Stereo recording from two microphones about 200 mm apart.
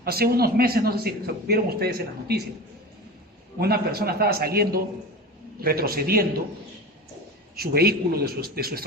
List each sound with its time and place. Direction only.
0.0 s a man's voice: 50° right (ahead or behind)
3.6 s a man's voice: 50° right (ahead or behind)
7.5 s a man's voice: 50° right (ahead or behind)